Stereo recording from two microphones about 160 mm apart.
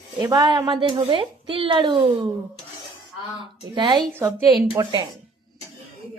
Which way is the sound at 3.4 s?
30° right (ahead or behind).